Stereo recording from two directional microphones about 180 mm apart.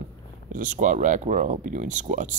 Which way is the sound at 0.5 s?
45° right (ahead or behind).